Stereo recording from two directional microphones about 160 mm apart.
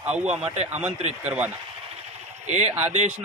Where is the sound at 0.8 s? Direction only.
45° right (ahead or behind).